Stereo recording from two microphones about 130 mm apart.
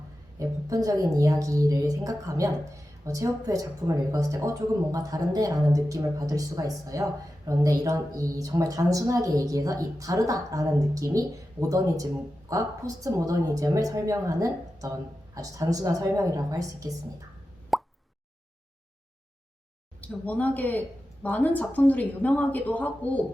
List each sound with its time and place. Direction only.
0.3 s speech: 25° right (ahead or behind)
12.5 s speech: 25° right (ahead or behind)
17.7 s plop: centre (ahead or behind)
20.0 s speech: 10° left (ahead or behind)